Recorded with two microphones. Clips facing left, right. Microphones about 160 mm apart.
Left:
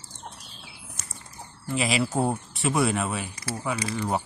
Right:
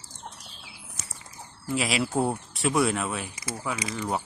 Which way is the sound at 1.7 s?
Centre (ahead or behind).